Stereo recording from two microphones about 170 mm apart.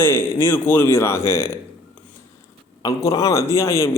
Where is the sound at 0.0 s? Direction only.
15° left (ahead or behind).